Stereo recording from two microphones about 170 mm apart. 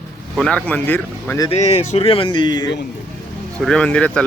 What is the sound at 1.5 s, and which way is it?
Speech, 40° left (ahead or behind).